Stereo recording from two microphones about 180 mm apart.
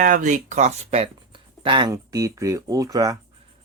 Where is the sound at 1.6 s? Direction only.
25° right (ahead or behind).